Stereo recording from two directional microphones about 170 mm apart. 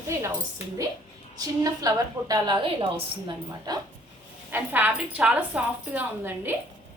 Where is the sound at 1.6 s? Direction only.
20° right (ahead or behind).